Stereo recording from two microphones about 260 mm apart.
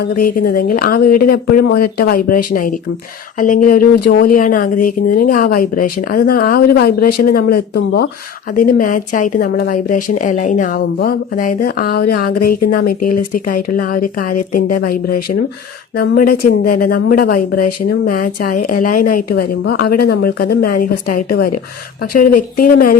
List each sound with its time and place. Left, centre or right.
0.0 s speech: left
16.0 s speech: left